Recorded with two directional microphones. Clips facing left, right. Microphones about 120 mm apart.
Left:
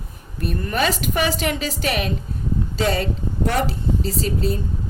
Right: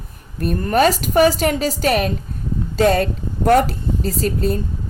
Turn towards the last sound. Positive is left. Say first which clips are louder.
# right 3 dB
turn(degrees=-50)  # may be behind; listen again after turning